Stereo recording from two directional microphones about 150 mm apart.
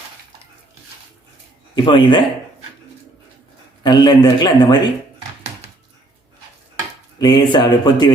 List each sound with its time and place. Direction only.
1.7 s speech: 35° left (ahead or behind)
3.8 s a man's voice: 30° left (ahead or behind)
7.2 s a man's voice: 30° left (ahead or behind)